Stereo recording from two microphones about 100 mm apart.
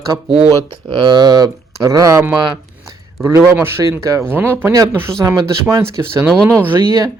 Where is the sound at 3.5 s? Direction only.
25° right (ahead or behind).